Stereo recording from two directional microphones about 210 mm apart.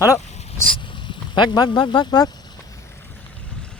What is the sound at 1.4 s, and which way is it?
Speech, 20° left (ahead or behind).